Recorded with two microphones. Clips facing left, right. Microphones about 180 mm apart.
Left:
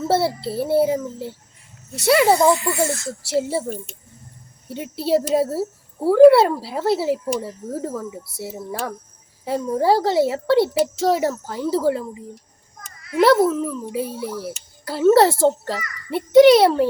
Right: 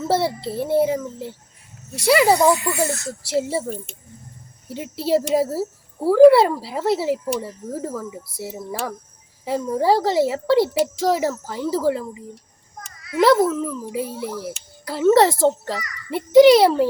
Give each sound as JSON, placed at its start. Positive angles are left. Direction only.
{"t": 0.1, "sound": "speech", "side_deg": 5}
{"t": 2.9, "sound": "speech", "side_deg": 30}
{"t": 3.5, "sound": "speech", "side_deg": 0}
{"t": 13.2, "sound": "speech", "side_deg": 5}